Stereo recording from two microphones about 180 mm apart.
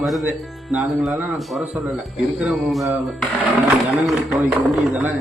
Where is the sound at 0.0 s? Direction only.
Centre (ahead or behind).